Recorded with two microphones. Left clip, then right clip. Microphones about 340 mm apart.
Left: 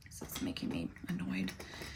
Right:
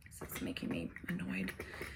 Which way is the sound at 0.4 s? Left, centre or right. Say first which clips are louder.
Left 1 dB; left.